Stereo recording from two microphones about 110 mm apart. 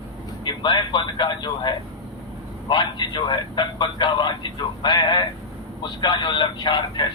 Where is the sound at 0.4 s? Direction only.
45° left (ahead or behind).